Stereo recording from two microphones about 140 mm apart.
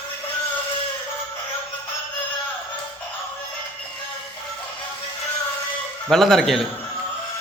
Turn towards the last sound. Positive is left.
turn(degrees=0)  # may be behind; listen again after turning